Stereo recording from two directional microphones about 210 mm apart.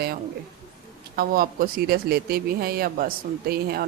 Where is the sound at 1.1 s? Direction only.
45° right (ahead or behind).